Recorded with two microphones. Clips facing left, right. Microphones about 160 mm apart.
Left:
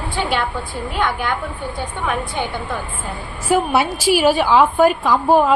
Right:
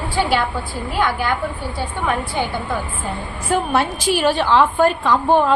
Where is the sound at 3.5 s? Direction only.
10° left (ahead or behind).